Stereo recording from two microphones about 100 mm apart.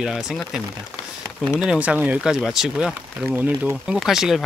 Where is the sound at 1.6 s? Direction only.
10° right (ahead or behind).